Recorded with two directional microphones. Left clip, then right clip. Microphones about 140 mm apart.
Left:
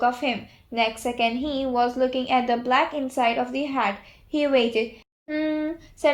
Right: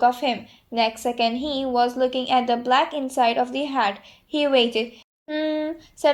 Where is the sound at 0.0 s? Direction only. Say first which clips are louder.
Right 3 dB; 35° right (ahead or behind).